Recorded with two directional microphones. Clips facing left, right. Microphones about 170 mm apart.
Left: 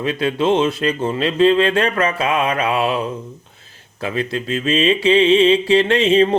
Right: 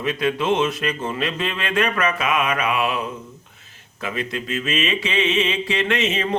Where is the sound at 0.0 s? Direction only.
30° left (ahead or behind).